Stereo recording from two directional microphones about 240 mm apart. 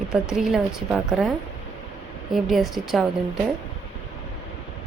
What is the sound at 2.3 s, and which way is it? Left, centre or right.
Speech, centre.